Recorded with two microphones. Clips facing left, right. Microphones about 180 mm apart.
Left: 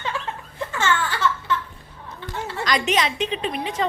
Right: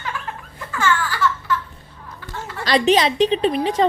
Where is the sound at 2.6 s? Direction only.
35° right (ahead or behind).